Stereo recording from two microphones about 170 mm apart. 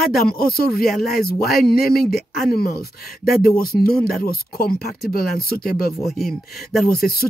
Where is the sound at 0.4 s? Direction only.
60° left (ahead or behind).